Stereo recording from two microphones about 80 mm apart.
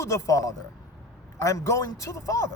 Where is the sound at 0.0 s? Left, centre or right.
Left.